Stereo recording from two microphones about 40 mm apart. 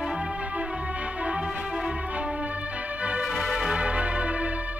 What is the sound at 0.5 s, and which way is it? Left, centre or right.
Music, right.